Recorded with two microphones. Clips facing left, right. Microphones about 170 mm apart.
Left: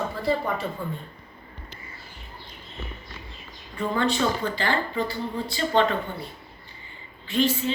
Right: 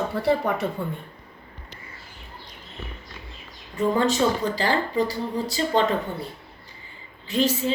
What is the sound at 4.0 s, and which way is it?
Speech, 40° right (ahead or behind).